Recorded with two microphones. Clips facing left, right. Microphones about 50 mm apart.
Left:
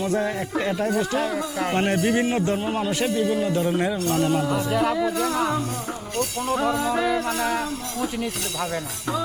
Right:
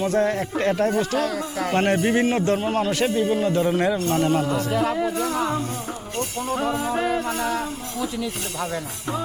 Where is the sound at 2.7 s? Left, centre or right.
Right.